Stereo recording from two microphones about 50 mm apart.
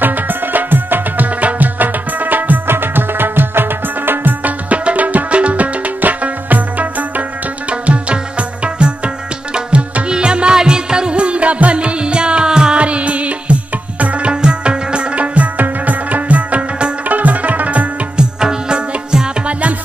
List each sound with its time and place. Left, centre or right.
0.0 s music: right
14.3 s tabla: centre
15.6 s music: right
18.1 s music: centre